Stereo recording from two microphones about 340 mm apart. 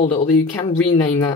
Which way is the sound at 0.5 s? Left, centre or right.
Centre.